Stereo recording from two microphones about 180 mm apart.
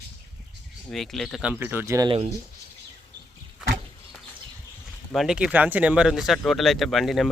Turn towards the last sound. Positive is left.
turn(degrees=0)  # may be behind; listen again after turning